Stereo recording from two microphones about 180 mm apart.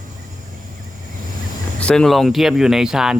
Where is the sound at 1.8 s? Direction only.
5° left (ahead or behind).